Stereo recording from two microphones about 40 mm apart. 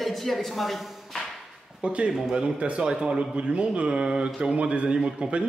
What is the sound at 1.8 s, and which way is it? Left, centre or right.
Speech, right.